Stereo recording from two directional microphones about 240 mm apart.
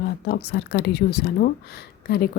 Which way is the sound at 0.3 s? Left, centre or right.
Left.